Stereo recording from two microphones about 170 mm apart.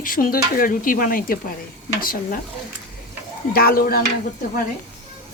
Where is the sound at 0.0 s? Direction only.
55° left (ahead or behind).